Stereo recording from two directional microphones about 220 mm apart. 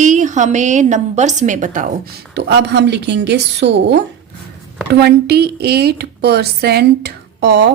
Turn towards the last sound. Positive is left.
turn(degrees=-50)  # may be behind; listen again after turning